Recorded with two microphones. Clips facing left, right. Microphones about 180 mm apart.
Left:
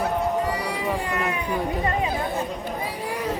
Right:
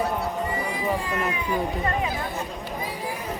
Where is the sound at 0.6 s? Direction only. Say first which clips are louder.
Even; 75° left (ahead or behind).